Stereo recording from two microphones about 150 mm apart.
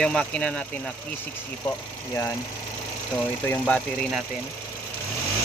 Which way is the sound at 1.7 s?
20° left (ahead or behind).